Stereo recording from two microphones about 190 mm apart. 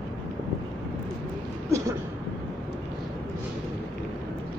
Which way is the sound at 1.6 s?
15° right (ahead or behind).